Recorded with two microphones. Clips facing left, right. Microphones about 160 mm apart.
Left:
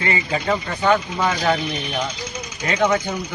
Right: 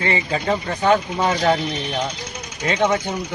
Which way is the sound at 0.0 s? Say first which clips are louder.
Right 1 dB; 35° right (ahead or behind).